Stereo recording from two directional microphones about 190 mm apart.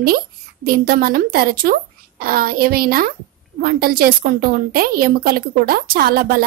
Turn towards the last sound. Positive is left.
turn(degrees=-50)  # may be behind; listen again after turning